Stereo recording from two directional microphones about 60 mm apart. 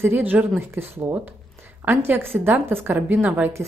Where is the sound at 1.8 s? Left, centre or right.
Right.